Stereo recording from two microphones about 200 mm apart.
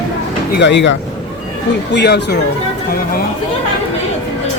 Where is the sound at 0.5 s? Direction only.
60° left (ahead or behind).